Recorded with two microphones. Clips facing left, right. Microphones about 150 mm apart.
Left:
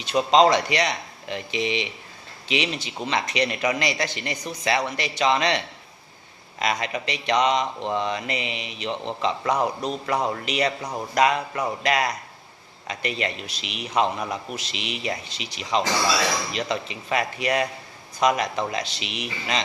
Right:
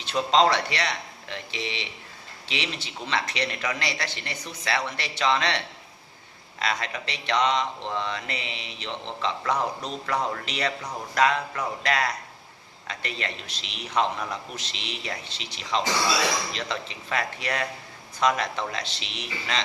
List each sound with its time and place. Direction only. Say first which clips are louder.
0.0 s speech: left 4 dB; 15° left (ahead or behind)